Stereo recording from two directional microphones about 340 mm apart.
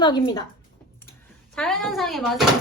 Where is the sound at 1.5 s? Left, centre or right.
Centre.